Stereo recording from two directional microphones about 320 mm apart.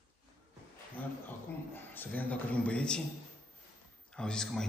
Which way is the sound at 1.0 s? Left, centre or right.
Centre.